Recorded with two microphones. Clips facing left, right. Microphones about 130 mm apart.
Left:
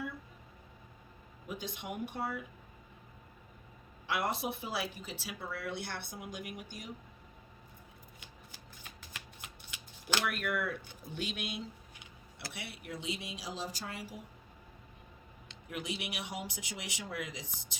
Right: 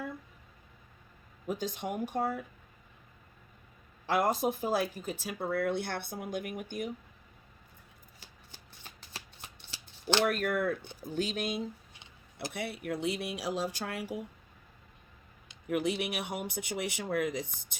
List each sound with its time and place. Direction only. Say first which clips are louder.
1.5 s speech: right 7 dB; 45° right (ahead or behind)
4.0 s speech: right 6 dB; 45° right (ahead or behind)
9.0 s shuffling cards: right 3 dB; 30° right (ahead or behind)
10.2 s speech: right 6 dB; 40° right (ahead or behind); by 14.2 s 60° right (ahead or behind)
15.7 s speech: right 9 dB; 55° right (ahead or behind)